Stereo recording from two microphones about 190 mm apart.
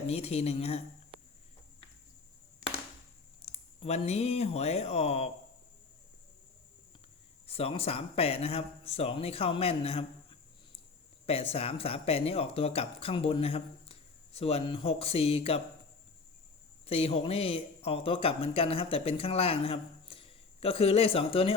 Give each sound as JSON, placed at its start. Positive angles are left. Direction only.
{"t": 0.1, "sound": "speech", "side_deg": 35}
{"t": 3.4, "sound": "speech", "side_deg": 35}
{"t": 7.4, "sound": "speech", "side_deg": 30}
{"t": 16.8, "sound": "speech", "side_deg": 30}